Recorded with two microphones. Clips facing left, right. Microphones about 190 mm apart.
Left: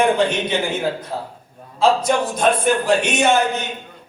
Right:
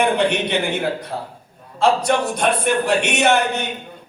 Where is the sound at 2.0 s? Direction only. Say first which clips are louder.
Left 1 dB; 65° right (ahead or behind).